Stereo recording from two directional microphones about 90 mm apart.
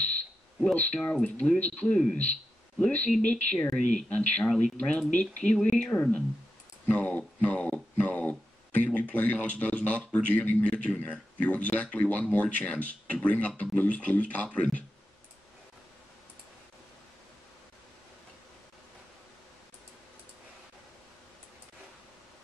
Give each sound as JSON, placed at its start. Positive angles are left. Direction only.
{"t": 0.7, "sound": "a man's voice", "side_deg": 15}